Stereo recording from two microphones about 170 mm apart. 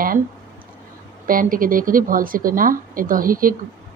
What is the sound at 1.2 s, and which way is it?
A woman's voice, 55° right (ahead or behind).